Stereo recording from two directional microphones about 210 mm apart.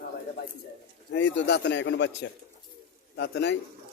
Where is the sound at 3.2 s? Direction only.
55° left (ahead or behind).